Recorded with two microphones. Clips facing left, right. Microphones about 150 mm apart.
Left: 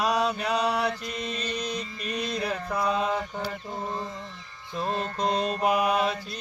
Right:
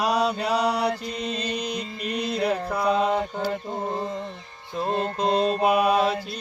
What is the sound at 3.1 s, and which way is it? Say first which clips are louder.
Mantra: right 5 dB; 35° right (ahead or behind).